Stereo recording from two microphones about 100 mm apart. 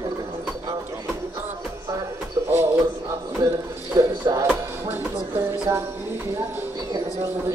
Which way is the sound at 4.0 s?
40° right (ahead or behind).